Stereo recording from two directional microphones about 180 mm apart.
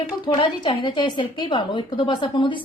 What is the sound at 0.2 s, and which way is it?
A woman's voice, 25° left (ahead or behind).